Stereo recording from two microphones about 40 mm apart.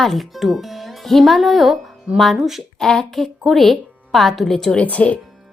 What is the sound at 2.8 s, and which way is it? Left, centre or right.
A woman's voice, centre.